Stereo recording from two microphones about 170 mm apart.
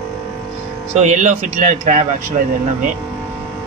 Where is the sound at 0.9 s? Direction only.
45° right (ahead or behind).